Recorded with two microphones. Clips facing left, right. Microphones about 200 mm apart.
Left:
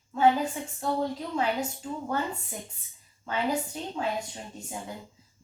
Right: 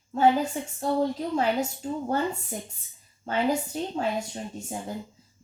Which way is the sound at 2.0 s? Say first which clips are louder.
Right 3 dB; 45° right (ahead or behind).